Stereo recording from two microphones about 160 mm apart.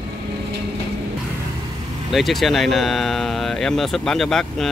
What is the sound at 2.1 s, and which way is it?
Speech, centre (ahead or behind).